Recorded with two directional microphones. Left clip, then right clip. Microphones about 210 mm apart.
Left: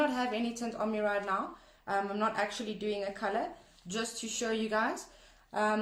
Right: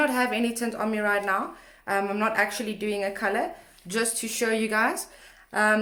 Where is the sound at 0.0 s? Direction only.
40° right (ahead or behind).